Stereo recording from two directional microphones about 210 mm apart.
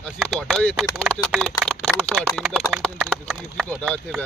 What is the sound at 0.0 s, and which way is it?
Speech, 5° left (ahead or behind).